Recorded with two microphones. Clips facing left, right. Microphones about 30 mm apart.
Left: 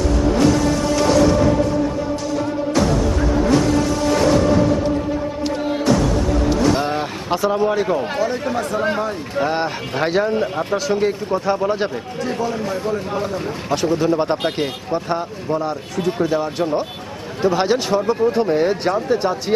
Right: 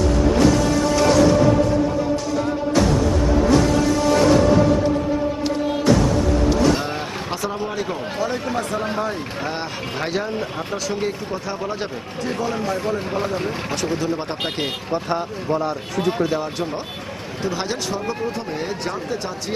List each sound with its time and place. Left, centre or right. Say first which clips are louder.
6.7 s a sound: left 4 dB; centre
8.2 s speech: left 3 dB; centre
9.4 s speech: left 6 dB; centre
12.4 s speech: even; centre
14.0 s speech: left 7 dB; centre
14.4 s speech: left 3 dB; centre
16.3 s speech: left 5 dB; centre
17.4 s speech: left 8 dB; centre